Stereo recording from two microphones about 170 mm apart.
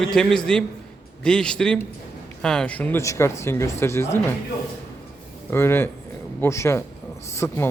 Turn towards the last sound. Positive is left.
turn(degrees=15)  # may be behind; listen again after turning